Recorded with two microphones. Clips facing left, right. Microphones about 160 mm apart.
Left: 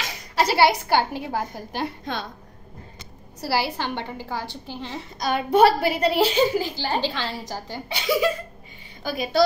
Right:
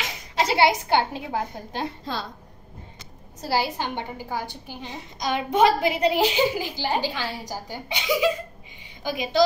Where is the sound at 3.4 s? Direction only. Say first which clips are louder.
Even; 15° right (ahead or behind).